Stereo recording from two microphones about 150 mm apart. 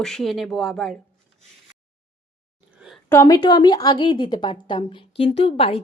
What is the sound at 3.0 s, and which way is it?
A woman's voice, 20° left (ahead or behind).